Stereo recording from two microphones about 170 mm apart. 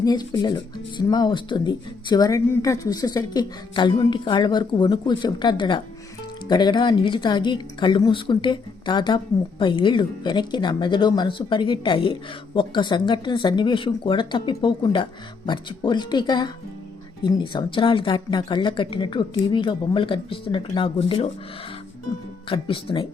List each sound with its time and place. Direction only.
0.0 s speech: 25° left (ahead or behind)
22.4 s speech: 30° left (ahead or behind)